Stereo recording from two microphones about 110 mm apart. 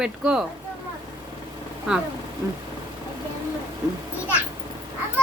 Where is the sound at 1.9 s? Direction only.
5° right (ahead or behind).